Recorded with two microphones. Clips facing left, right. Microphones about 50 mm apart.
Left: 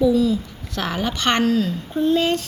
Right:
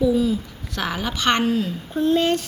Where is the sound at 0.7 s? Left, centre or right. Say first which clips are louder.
Left 2 dB; centre.